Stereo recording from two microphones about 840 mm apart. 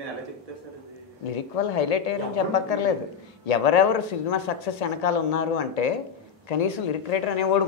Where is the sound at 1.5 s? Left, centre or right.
Left.